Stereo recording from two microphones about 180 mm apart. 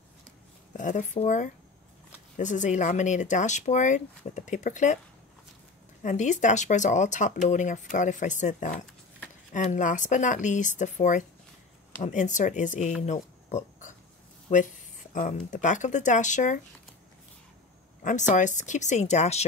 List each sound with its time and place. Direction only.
0.7 s speech: 45° left (ahead or behind)
6.0 s speech: 40° left (ahead or behind)
13.0 s a sound: 40° left (ahead or behind)
14.5 s speech: 45° left (ahead or behind)
18.0 s speech: 45° left (ahead or behind)